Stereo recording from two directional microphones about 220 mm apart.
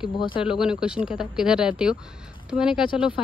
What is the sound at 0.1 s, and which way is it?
Speech, 20° left (ahead or behind).